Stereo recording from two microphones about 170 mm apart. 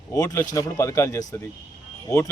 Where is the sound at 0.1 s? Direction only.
20° left (ahead or behind).